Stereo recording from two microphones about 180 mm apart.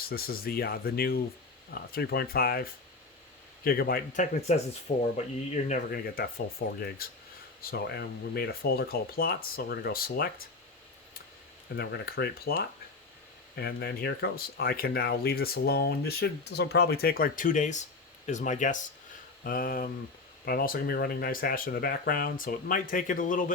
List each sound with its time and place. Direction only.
0.1 s speech: 55° left (ahead or behind)
11.8 s speech: 60° left (ahead or behind)